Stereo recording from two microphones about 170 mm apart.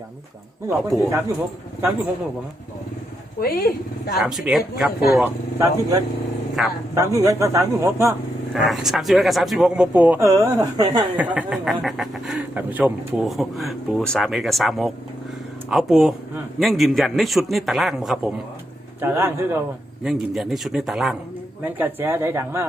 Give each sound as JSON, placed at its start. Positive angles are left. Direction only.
{"t": 0.7, "sound": "a man's voice", "side_deg": -20}
{"t": 3.4, "sound": "speech", "side_deg": 65}
{"t": 4.2, "sound": "speech", "side_deg": -5}
{"t": 6.6, "sound": "speech", "side_deg": 0}
{"t": 6.9, "sound": "a man's voice", "side_deg": -20}
{"t": 8.5, "sound": "speech", "side_deg": 0}
{"t": 11.2, "sound": "speech", "side_deg": -10}
{"t": 18.9, "sound": "a man's voice", "side_deg": -10}
{"t": 20.1, "sound": "a man's voice", "side_deg": 0}